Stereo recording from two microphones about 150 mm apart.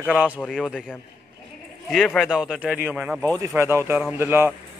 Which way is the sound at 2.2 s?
5° right (ahead or behind).